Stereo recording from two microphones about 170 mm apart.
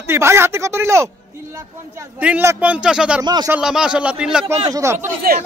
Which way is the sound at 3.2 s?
25° right (ahead or behind).